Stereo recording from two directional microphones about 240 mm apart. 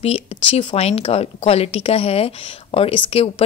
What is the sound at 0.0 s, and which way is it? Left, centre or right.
Speech, left.